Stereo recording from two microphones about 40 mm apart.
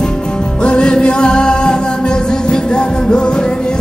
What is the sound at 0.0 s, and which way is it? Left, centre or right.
Music, left.